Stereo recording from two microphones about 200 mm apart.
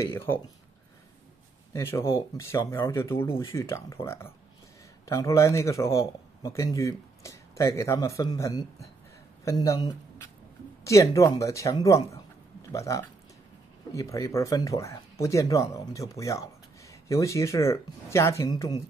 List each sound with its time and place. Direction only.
0.0 s speech: 10° left (ahead or behind)
1.7 s speech: 15° left (ahead or behind)